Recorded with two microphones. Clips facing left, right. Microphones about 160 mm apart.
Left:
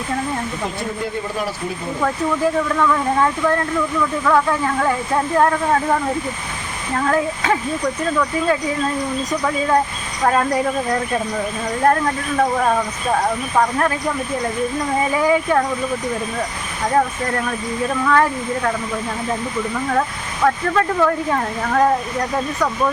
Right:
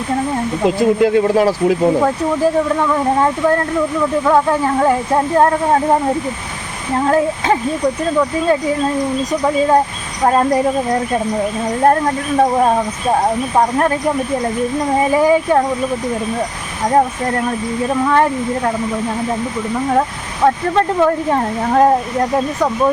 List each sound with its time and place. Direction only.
0.8 s speech: 90° right
2.6 s speech: 25° right (ahead or behind)
10.2 s speech: 25° right (ahead or behind)
15.1 s speech: 30° right (ahead or behind)
17.8 s speech: 25° right (ahead or behind)
19.9 s speech: 25° right (ahead or behind)